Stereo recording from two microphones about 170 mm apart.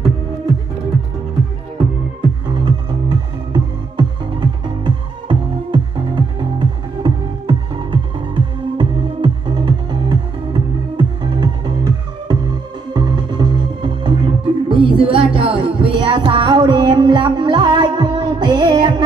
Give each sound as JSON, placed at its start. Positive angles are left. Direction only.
{"t": 2.5, "sound": "music", "side_deg": -25}